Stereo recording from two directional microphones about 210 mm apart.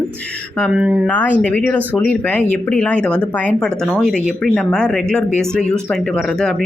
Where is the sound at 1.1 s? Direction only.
5° left (ahead or behind).